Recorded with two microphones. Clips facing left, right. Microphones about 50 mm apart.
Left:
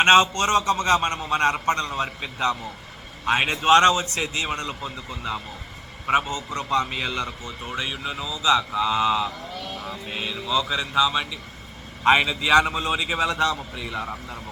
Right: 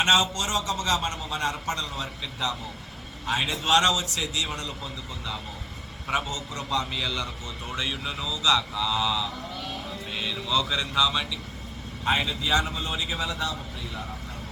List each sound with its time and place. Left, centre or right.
0.0 s a man's voice: left
7.6 s speech: centre; by 9.3 s left
10.1 s speech: left
10.5 s speech: centre
12.0 s a man's voice: left